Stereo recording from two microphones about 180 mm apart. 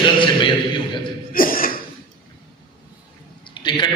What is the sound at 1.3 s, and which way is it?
Cough, 50° left (ahead or behind).